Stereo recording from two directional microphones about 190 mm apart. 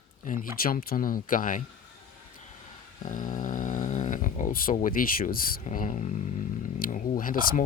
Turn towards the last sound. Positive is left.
turn(degrees=45)  # may be behind; listen again after turning